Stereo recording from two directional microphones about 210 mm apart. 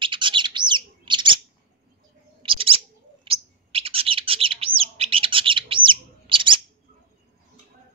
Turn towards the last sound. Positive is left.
turn(degrees=-25)  # may be behind; listen again after turning